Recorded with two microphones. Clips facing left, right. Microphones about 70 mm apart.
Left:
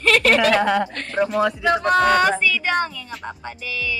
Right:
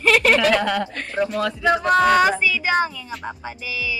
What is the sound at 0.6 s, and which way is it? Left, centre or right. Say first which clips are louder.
Speech: left 3 dB; centre.